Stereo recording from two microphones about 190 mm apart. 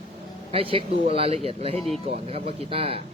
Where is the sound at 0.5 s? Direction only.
30° right (ahead or behind).